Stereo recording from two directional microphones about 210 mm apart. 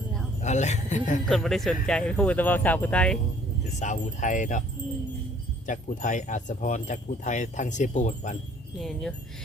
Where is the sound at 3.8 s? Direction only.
35° left (ahead or behind).